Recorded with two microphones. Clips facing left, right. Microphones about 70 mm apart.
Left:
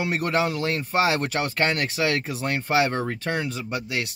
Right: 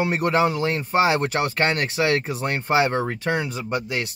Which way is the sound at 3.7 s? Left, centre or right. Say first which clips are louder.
Right 5 dB; right.